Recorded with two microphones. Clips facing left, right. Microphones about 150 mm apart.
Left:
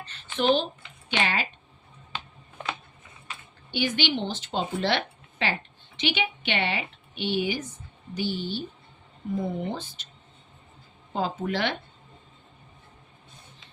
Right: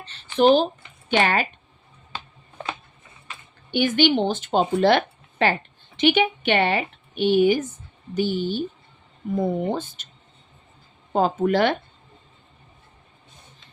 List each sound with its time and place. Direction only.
0.0 s speech: 30° right (ahead or behind)
1.1 s speech: 50° right (ahead or behind)
3.7 s speech: 50° right (ahead or behind)
11.1 s speech: 50° right (ahead or behind)